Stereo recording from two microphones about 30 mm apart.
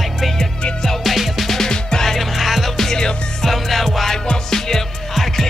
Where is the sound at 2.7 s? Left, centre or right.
Centre.